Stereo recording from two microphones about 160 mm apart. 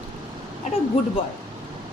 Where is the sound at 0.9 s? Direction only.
40° left (ahead or behind).